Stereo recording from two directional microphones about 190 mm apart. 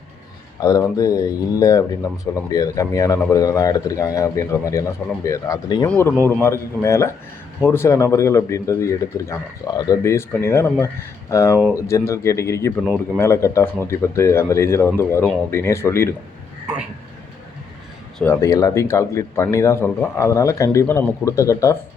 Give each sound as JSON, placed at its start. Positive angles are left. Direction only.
{"t": 0.6, "sound": "speech", "side_deg": 20}
{"t": 18.2, "sound": "speech", "side_deg": 15}